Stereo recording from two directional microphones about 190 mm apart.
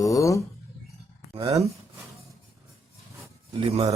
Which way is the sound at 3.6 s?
30° right (ahead or behind).